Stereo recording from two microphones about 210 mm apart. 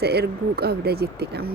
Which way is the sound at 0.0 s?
50° right (ahead or behind).